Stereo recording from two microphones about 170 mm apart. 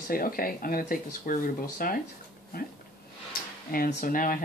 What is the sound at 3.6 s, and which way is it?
Speech, 60° left (ahead or behind).